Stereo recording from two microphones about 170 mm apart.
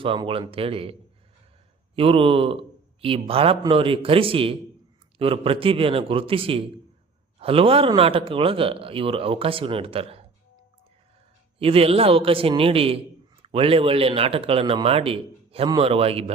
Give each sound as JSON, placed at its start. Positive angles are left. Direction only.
{"t": 0.0, "sound": "speech", "side_deg": -30}
{"t": 2.0, "sound": "speech", "side_deg": -35}
{"t": 11.6, "sound": "speech", "side_deg": -35}